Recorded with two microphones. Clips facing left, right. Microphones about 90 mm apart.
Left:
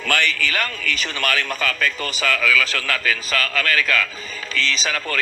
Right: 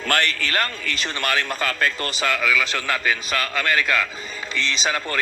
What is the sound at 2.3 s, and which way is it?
A man's voice, 10° right (ahead or behind).